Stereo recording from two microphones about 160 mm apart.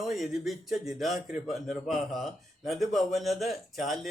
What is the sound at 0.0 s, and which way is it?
A man's voice, centre (ahead or behind).